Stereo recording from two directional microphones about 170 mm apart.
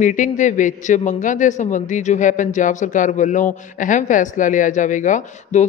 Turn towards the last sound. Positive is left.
turn(degrees=45)  # may be behind; listen again after turning